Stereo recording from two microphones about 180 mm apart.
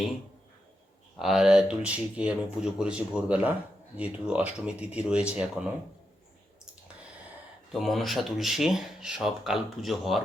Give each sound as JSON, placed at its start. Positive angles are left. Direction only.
{"t": 1.2, "sound": "speech", "side_deg": 0}
{"t": 7.7, "sound": "speech", "side_deg": 0}